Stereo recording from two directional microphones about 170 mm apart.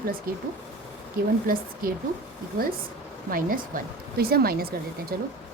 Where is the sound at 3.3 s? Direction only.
55° right (ahead or behind).